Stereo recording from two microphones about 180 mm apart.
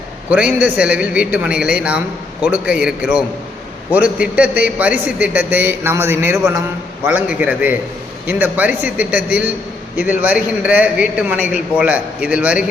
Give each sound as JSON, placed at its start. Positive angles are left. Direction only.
{"t": 0.3, "sound": "a man's voice", "side_deg": -10}